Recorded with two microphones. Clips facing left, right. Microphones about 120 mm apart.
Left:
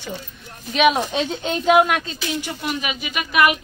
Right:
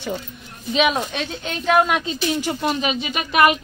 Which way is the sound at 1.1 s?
25° left (ahead or behind).